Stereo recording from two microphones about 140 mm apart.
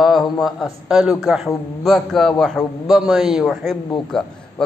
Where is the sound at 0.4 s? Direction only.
Centre (ahead or behind).